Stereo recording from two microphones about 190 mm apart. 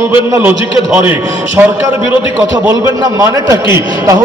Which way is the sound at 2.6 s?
15° right (ahead or behind).